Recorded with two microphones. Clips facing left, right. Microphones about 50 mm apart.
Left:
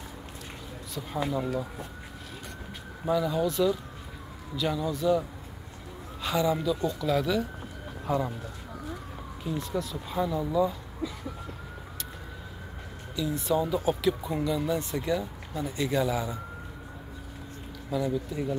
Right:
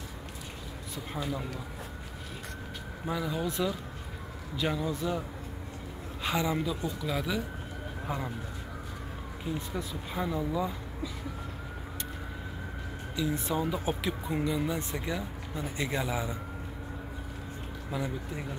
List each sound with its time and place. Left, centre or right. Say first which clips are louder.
1.2 s speech: left 8 dB; centre
3.1 s speech: left 6 dB; centre
4.6 s speech: left 2 dB; centre
6.2 s speech: left 4 dB; right
9.6 s speech: left 4 dB; centre
13.1 s speech: left 3 dB; right
17.9 s speech: left 6 dB; right